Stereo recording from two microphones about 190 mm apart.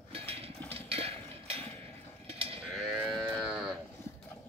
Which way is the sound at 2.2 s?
30° right (ahead or behind).